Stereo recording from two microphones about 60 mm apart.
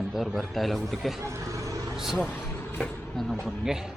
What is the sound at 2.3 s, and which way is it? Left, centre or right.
Vehicle, left.